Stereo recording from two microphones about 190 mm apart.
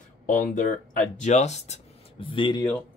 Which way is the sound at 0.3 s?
45° left (ahead or behind).